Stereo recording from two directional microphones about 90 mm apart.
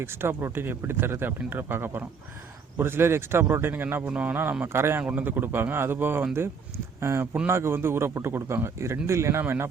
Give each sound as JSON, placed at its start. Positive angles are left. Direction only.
{"t": 0.0, "sound": "speech", "side_deg": -25}